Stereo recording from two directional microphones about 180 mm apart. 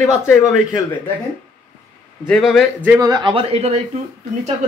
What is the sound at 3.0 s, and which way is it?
Speech, 20° right (ahead or behind).